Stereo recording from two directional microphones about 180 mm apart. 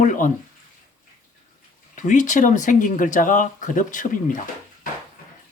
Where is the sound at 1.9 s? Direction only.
45° left (ahead or behind).